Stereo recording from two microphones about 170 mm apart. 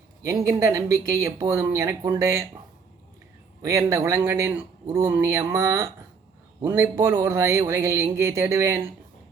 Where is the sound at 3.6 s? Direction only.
20° right (ahead or behind).